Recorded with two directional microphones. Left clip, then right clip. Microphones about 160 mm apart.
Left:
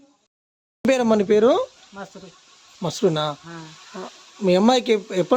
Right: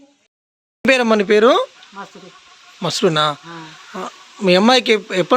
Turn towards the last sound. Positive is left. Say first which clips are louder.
# right 4 dB
turn(degrees=5)  # may be behind; listen again after turning